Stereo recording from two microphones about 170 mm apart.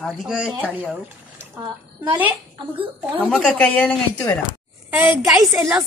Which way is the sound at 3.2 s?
5° left (ahead or behind).